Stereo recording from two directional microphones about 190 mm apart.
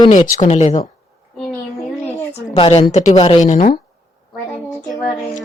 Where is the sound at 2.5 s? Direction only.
30° left (ahead or behind).